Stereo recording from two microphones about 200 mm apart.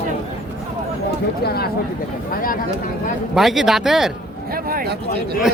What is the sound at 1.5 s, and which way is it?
Speech, 50° left (ahead or behind).